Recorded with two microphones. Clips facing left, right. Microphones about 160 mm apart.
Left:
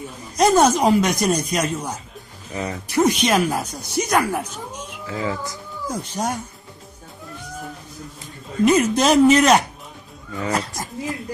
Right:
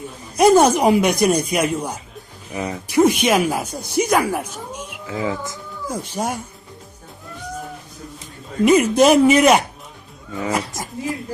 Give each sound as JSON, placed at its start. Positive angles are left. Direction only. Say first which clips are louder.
{"t": 0.3, "sound": "speech", "louder": "right 3 dB", "side_deg": -10}
{"t": 3.7, "sound": "speech", "louder": "right 4 dB", "side_deg": -55}
{"t": 4.1, "sound": "speech", "louder": "even", "side_deg": -5}
{"t": 4.9, "sound": "speech", "louder": "right 2 dB", "side_deg": -15}
{"t": 5.9, "sound": "speech", "louder": "right 1 dB", "side_deg": -10}
{"t": 8.6, "sound": "speech", "louder": "right 3 dB", "side_deg": -10}